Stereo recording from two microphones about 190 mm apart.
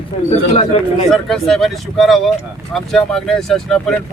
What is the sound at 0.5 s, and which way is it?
Speech, 30° left (ahead or behind).